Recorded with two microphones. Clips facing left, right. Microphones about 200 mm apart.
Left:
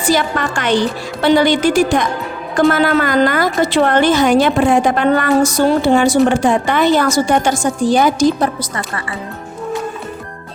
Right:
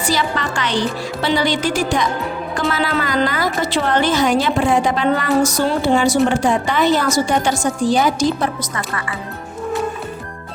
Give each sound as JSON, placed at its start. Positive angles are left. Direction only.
{"t": 0.1, "sound": "a woman's voice", "side_deg": 50}
{"t": 8.4, "sound": "a woman's voice", "side_deg": 30}